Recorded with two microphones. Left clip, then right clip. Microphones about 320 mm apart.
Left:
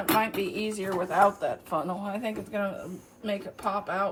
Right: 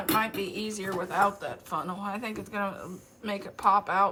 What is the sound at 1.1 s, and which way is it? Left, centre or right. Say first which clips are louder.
Speech: left 4 dB; centre.